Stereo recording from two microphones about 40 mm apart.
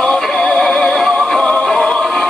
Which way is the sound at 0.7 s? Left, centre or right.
Centre.